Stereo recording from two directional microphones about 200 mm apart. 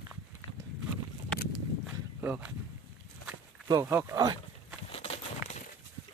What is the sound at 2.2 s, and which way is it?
Speech, 10° right (ahead or behind).